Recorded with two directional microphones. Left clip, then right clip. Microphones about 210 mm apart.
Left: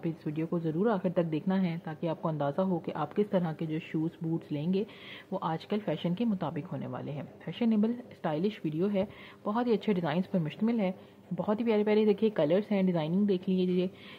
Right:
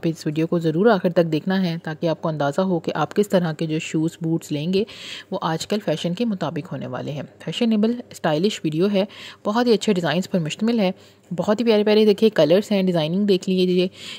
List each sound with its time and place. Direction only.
0.0 s speech: 45° right (ahead or behind)